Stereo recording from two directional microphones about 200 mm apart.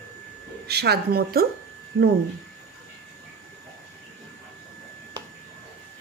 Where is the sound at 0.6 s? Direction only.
55° right (ahead or behind).